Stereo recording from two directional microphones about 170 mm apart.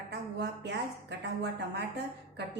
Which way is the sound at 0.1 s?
80° right.